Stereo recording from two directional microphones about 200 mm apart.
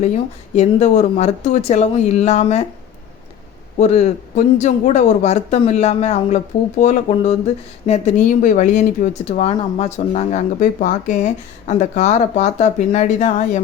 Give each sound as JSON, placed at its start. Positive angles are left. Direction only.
{"t": 0.5, "sound": "speech", "side_deg": 35}
{"t": 3.8, "sound": "speech", "side_deg": 35}